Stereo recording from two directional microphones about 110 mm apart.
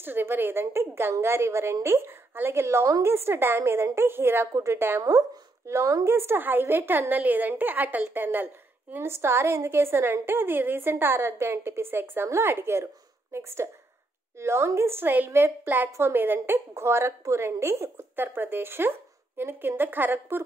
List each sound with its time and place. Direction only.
0.0 s a woman's voice: 20° right (ahead or behind)